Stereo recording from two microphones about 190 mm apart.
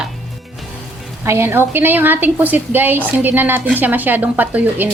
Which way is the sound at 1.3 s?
15° right (ahead or behind).